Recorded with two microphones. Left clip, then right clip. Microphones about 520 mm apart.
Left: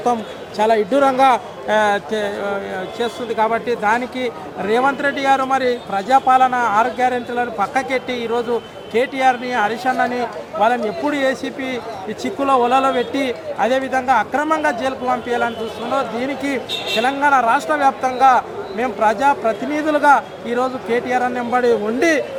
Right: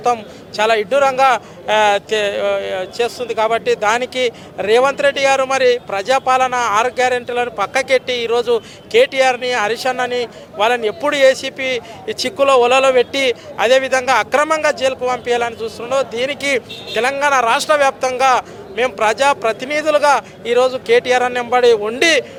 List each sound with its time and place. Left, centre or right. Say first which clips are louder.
0.0 s a man's voice: right 2 dB; right
10.6 s speech: right 2 dB; right
17.0 s speech: right 1 dB; right